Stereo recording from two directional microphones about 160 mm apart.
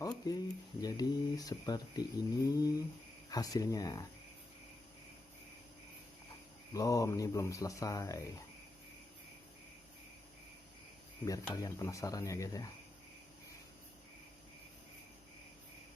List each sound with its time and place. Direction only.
0.0 s speech: 25° left (ahead or behind)
6.7 s speech: 20° left (ahead or behind)
11.3 s speech: 20° left (ahead or behind)